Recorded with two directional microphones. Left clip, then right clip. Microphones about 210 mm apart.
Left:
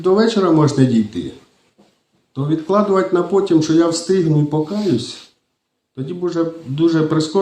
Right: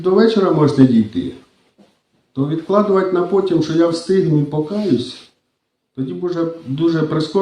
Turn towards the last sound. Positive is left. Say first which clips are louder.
# left 1 dB
turn(degrees=35)  # may be behind; listen again after turning